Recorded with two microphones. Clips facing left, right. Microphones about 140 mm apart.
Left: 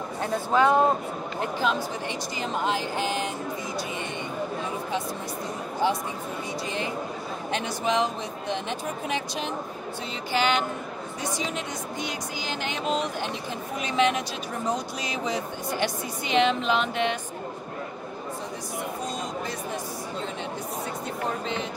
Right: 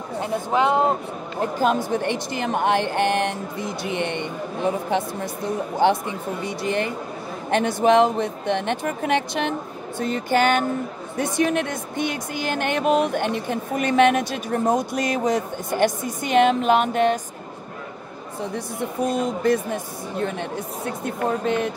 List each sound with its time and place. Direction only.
0.2 s speech: 20° right (ahead or behind)
1.4 s speech: 50° right (ahead or behind)
1.9 s speech: 60° right (ahead or behind)
5.8 s speech: 70° right (ahead or behind); by 17.2 s 45° right (ahead or behind)
19.0 s speech: 60° right (ahead or behind)